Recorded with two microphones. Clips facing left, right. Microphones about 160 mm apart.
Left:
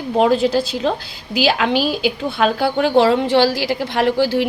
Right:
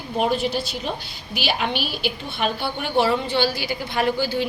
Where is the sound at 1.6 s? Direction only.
90° left.